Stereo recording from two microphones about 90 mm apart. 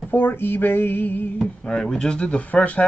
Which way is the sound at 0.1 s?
20° left (ahead or behind).